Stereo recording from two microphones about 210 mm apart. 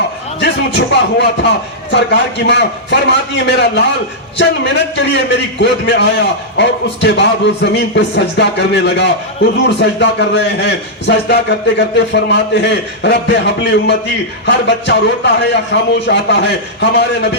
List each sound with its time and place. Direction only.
0.3 s a man's voice: 55° left (ahead or behind)
4.9 s a man's voice: 55° left (ahead or behind)